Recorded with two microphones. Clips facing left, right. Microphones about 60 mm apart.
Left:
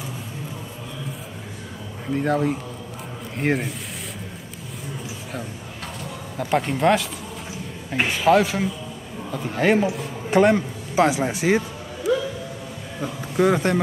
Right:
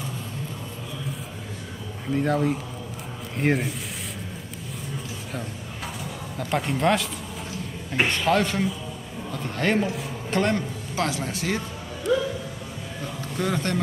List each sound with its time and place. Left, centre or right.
2.0 s a man's voice: centre
6.3 s a man's voice: centre
10.3 s a man's voice: centre
12.0 s music: centre
13.4 s a man's voice: centre